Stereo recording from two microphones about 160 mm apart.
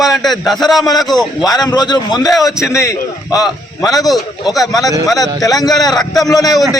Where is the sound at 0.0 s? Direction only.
Centre (ahead or behind).